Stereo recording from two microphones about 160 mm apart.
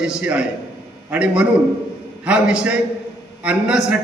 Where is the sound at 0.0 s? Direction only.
5° right (ahead or behind).